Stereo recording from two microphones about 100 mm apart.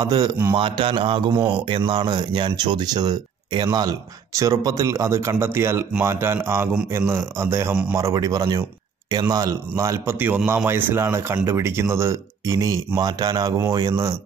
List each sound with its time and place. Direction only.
0.0 s speech: 45° right (ahead or behind)
0.6 s a man's voice: 60° right (ahead or behind); by 14.1 s 35° right (ahead or behind)